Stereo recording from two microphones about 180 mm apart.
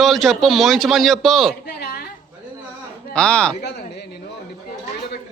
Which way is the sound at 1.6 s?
65° left (ahead or behind).